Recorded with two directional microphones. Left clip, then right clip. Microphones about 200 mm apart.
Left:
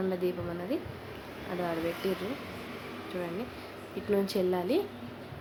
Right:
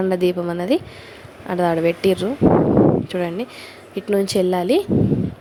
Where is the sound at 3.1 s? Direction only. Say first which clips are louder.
Right 12 dB; 45° right (ahead or behind).